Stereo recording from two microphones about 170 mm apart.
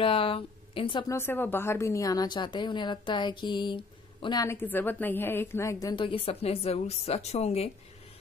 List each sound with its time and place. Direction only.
0.0 s speech: 30° left (ahead or behind)
1.1 s a woman's voice: 15° left (ahead or behind); by 7.7 s 35° left (ahead or behind)